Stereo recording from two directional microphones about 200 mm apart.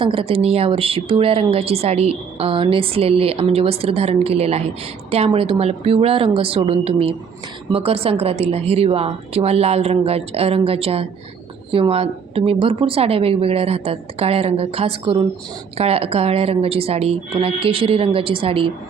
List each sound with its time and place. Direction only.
0.0 s speech: 25° right (ahead or behind)